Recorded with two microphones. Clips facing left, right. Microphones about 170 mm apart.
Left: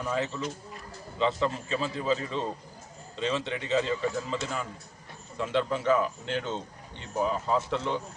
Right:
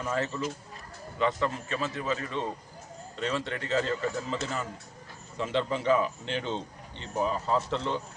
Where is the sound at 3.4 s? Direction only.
15° left (ahead or behind).